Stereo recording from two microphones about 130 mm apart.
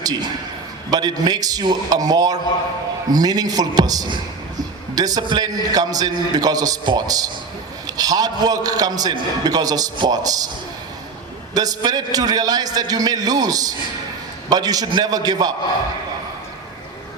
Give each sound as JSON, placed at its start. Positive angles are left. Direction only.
{"t": 0.0, "sound": "a man's voice", "side_deg": -30}
{"t": 11.5, "sound": "a man's voice", "side_deg": -30}